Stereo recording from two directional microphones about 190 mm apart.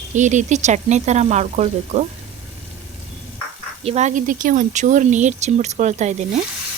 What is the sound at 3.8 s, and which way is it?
Speech, 35° right (ahead or behind).